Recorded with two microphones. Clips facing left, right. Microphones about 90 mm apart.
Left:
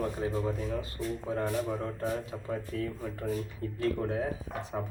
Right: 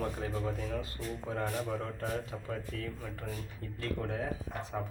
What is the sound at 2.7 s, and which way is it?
Speech, 30° left (ahead or behind).